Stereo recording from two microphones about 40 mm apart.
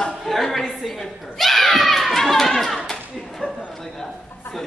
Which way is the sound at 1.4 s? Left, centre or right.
Centre.